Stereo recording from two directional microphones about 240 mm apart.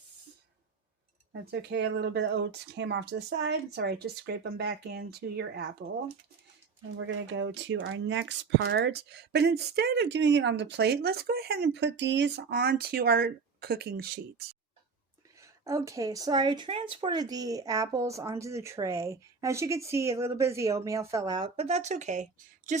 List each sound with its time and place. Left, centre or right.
1.3 s speech: right
6.9 s speech: right
15.4 s speech: centre; by 22.8 s right